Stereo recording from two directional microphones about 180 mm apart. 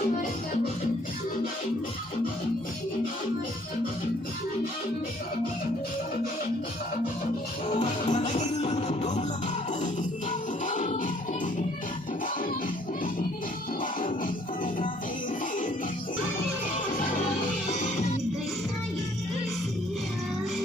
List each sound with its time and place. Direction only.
7.7 s music: 40° left (ahead or behind)
10.7 s music: 45° left (ahead or behind)